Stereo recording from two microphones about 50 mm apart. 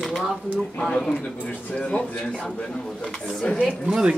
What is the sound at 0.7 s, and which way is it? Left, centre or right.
Speech, centre.